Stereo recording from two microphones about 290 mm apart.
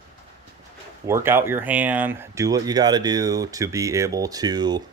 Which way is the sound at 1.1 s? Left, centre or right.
Centre.